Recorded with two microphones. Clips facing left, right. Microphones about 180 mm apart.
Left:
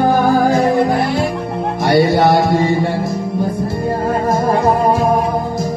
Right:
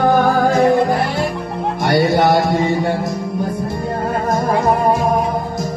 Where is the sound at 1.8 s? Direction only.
Centre (ahead or behind).